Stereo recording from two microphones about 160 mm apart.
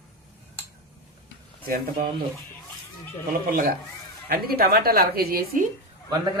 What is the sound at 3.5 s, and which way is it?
Speech, 65° right (ahead or behind).